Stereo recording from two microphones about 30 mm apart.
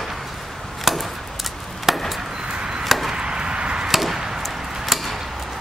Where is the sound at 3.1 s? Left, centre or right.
Right.